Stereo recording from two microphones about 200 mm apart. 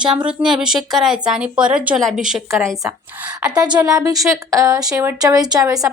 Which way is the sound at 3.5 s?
20° right (ahead or behind).